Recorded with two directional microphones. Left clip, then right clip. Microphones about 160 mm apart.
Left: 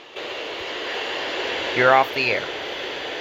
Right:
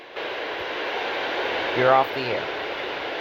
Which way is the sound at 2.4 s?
20° right (ahead or behind).